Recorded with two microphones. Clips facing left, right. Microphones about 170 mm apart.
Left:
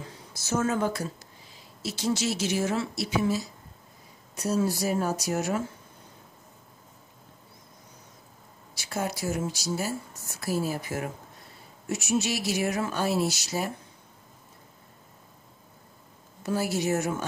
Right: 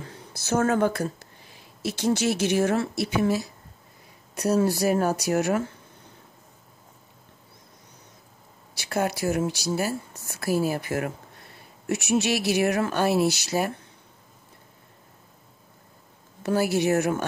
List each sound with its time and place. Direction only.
0.4 s speech: 60° right (ahead or behind)
8.7 s speech: 65° right (ahead or behind)
16.4 s speech: 65° right (ahead or behind)